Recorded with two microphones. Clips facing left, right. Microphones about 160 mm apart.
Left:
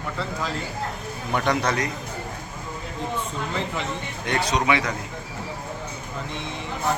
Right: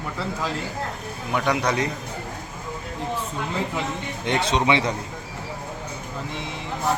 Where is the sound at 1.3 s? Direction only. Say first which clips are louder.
Right 1 dB; 10° right (ahead or behind).